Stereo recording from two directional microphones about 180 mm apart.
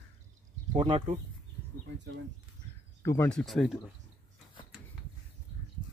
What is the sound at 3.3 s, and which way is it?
Speech, 5° left (ahead or behind).